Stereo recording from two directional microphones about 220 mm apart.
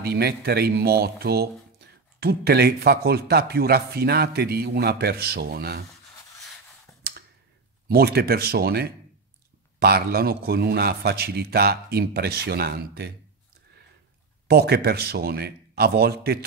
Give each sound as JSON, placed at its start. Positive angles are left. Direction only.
{"t": 0.0, "sound": "speech", "side_deg": -45}
{"t": 7.9, "sound": "speech", "side_deg": -45}
{"t": 14.5, "sound": "speech", "side_deg": -45}